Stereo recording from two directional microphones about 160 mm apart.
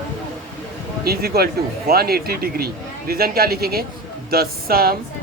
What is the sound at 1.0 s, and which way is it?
Speech, 75° right (ahead or behind).